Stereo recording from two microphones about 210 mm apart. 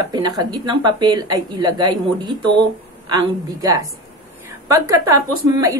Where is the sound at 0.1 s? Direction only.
20° right (ahead or behind).